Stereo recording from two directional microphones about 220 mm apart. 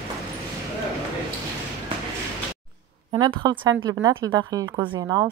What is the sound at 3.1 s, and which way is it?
A woman's voice, 20° right (ahead or behind).